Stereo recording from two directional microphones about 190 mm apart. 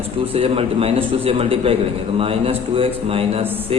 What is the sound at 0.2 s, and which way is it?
A man's voice, 30° right (ahead or behind).